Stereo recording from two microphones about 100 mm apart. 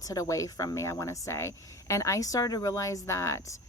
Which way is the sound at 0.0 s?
35° left (ahead or behind).